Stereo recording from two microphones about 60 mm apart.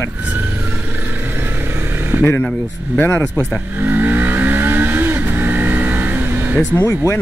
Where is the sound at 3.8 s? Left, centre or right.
Right.